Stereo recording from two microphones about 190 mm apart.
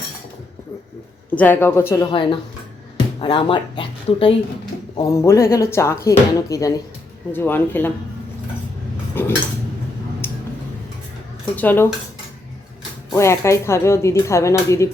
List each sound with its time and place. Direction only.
1.4 s speech: 10° left (ahead or behind); by 4.4 s 25° left (ahead or behind)
4.9 s speech: 15° left (ahead or behind)
9.2 s speech: 10° left (ahead or behind)
10.2 s a sound: 10° left (ahead or behind)
11.5 s speech: 10° left (ahead or behind)
13.1 s speech: 15° left (ahead or behind)